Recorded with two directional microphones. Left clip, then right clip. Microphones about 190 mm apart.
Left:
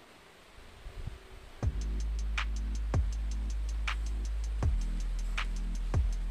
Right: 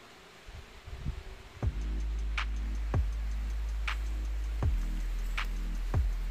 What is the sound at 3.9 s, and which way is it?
Tick-tock, 60° left (ahead or behind).